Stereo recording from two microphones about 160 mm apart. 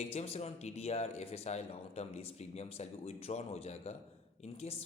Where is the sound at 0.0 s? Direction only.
40° left (ahead or behind).